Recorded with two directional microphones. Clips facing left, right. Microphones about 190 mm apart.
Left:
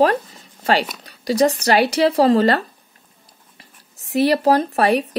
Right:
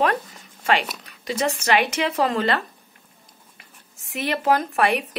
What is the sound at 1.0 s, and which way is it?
A woman's voice, 35° left (ahead or behind).